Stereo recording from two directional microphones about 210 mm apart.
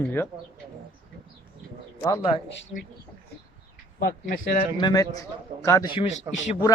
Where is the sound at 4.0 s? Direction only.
40° left (ahead or behind).